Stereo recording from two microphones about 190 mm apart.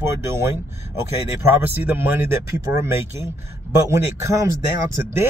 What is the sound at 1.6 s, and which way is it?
Speech, 10° right (ahead or behind).